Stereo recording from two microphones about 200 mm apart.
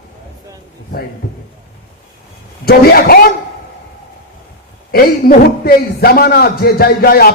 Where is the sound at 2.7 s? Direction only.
50° left (ahead or behind).